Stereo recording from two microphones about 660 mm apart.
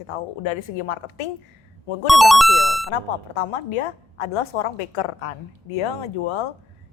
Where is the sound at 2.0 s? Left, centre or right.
Centre.